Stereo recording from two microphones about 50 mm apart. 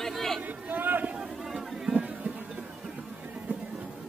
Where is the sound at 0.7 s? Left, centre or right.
Right.